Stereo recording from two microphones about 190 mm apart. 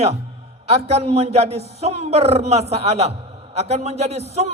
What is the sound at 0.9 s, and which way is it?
A man's voice, 35° right (ahead or behind).